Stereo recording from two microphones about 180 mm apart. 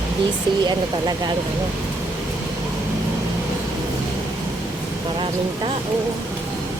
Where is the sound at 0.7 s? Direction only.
20° right (ahead or behind).